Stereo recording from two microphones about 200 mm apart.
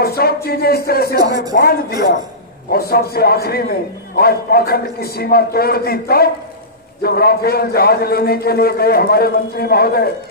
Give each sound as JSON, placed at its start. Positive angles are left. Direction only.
{"t": 0.2, "sound": "a man's voice", "side_deg": 50}